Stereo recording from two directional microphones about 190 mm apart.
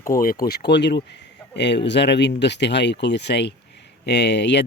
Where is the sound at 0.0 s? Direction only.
50° left (ahead or behind).